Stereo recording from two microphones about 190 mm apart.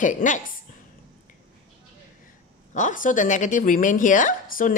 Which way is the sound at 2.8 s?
45° left (ahead or behind).